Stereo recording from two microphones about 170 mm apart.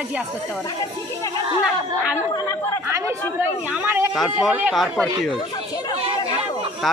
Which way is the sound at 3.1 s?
10° right (ahead or behind).